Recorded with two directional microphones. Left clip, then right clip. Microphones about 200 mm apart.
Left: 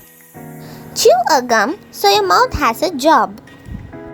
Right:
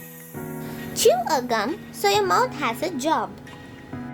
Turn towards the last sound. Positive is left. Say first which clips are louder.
# left 11 dB
turn(degrees=30)  # may be behind; listen again after turning